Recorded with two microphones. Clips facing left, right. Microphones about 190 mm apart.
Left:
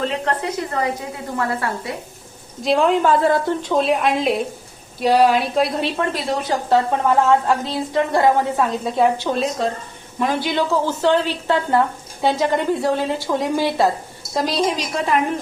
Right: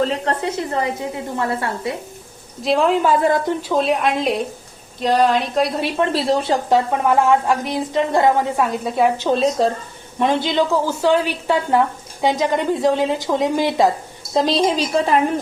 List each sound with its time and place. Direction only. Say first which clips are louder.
0.0 s a woman's voice: right 2 dB; 35° right (ahead or behind)
2.6 s a woman's voice: even; centre (ahead or behind); by 3.7 s 15° right (ahead or behind)
3.7 s a woman's voice: even; centre (ahead or behind)
6.0 s a woman's voice: right 4 dB; 30° right (ahead or behind)
6.7 s a woman's voice: left 2 dB; 15° right (ahead or behind)
9.1 s a woman's voice: right 4 dB; 25° right (ahead or behind)